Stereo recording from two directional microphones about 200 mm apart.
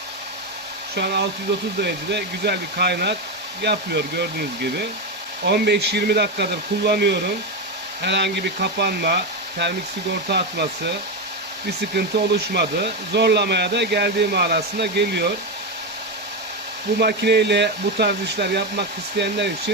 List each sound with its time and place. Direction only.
0.9 s speech: 55° right (ahead or behind)
17.0 s speech: 55° right (ahead or behind)